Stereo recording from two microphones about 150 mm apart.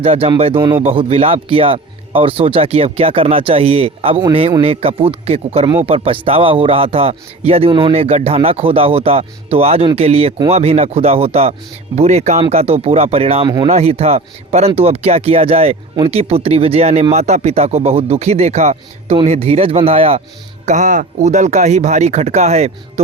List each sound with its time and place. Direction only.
0.0 s speech: 40° right (ahead or behind)
20.7 s speech: 55° right (ahead or behind)